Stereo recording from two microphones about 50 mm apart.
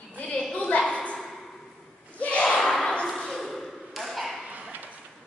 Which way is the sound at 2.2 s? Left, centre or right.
Left.